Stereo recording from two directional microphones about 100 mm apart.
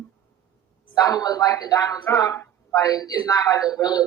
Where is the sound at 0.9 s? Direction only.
40° left (ahead or behind).